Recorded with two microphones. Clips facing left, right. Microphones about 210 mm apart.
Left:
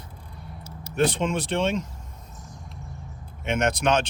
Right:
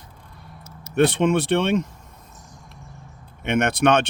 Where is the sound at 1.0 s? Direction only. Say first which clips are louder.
Right 5 dB; 65° right (ahead or behind).